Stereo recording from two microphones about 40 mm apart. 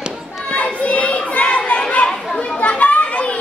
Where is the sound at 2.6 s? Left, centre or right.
Left.